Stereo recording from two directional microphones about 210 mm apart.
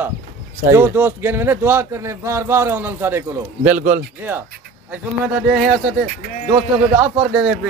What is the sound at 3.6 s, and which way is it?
Speech, 35° right (ahead or behind).